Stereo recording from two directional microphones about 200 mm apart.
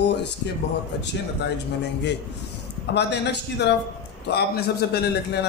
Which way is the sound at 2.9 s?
60° left (ahead or behind).